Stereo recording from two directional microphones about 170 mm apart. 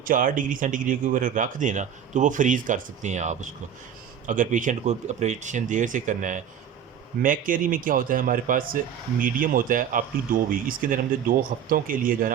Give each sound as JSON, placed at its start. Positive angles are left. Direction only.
{"t": 0.0, "sound": "speech", "side_deg": -55}